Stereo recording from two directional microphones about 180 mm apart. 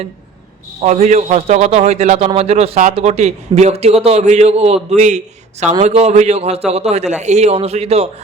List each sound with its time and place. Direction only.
0.8 s a man's voice: 40° right (ahead or behind)